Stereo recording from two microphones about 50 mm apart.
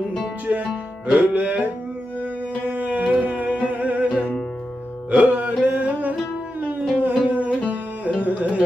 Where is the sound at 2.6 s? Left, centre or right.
Right.